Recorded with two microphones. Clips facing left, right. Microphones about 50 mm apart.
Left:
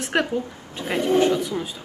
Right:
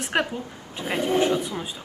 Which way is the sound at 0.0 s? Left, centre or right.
Centre.